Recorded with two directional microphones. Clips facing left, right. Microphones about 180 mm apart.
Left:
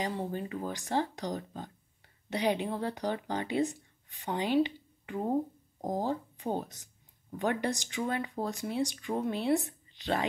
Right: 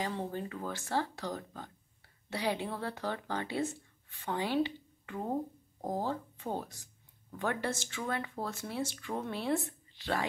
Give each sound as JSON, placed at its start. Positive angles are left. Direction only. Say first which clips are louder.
{"t": 0.0, "sound": "a woman's voice", "louder": "left 2 dB", "side_deg": 15}